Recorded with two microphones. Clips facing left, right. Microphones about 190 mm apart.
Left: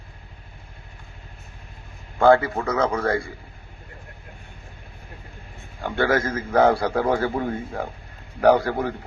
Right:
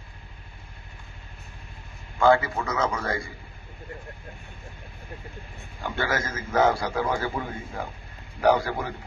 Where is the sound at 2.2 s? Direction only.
55° left (ahead or behind).